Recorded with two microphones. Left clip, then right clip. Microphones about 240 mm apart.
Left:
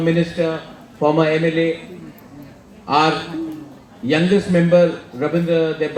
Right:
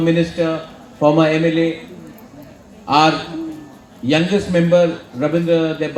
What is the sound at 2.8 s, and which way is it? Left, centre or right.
A man's voice, right.